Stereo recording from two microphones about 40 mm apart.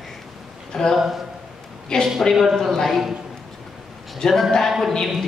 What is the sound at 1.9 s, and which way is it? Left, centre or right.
Speech, left.